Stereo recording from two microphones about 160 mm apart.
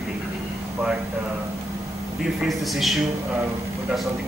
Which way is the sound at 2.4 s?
Centre (ahead or behind).